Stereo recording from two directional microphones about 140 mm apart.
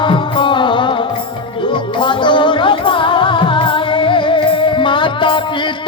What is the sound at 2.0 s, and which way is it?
Music, 35° left (ahead or behind).